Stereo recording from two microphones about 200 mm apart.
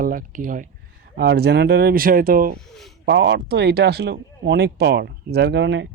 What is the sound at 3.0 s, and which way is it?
Speech, 60° right (ahead or behind).